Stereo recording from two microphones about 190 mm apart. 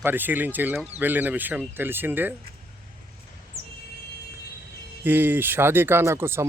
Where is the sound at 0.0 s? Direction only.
10° right (ahead or behind).